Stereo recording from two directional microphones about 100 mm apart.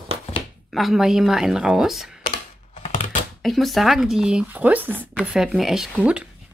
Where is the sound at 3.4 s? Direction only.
Centre (ahead or behind).